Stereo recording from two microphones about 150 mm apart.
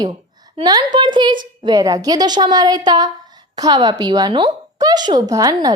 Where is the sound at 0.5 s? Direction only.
30° right (ahead or behind).